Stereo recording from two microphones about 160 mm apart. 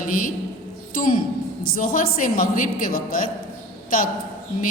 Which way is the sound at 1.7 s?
60° left (ahead or behind).